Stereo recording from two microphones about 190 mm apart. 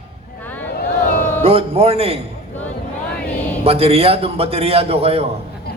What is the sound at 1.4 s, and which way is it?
Speech, 30° right (ahead or behind).